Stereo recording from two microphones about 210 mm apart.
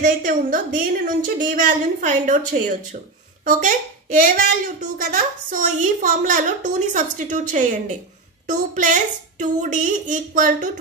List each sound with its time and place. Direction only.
0.0 s a woman's voice: 40° right (ahead or behind)